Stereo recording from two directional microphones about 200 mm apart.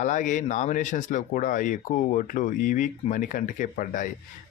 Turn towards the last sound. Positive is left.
turn(degrees=40)  # may be behind; listen again after turning